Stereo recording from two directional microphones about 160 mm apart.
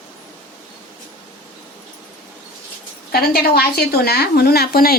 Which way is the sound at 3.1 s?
75° left (ahead or behind).